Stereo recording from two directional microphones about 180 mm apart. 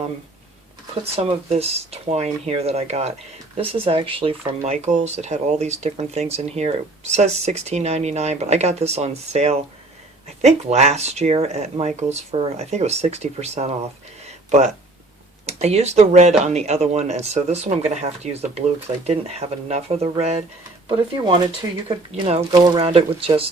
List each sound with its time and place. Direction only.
1.1 s speech: 35° right (ahead or behind)
15.4 s speech: 35° right (ahead or behind)
20.8 s speech: 25° right (ahead or behind)
22.1 s speech: 35° right (ahead or behind)
22.5 s speech: 20° right (ahead or behind)
22.8 s speech: 35° right (ahead or behind)